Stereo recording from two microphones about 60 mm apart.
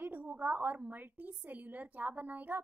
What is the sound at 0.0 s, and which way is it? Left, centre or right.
A woman's voice, right.